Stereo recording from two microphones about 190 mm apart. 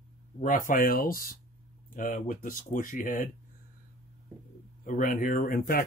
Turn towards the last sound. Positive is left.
turn(degrees=50)  # may be behind; listen again after turning